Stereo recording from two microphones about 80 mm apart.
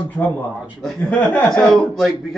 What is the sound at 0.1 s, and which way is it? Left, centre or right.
Speech, centre.